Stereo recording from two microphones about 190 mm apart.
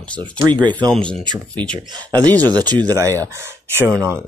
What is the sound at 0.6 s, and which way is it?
Speech, 25° right (ahead or behind).